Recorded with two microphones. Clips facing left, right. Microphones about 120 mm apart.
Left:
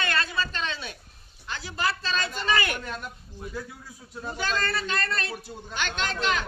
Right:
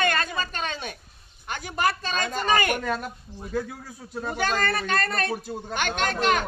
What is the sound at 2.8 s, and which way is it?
Speech, 90° right.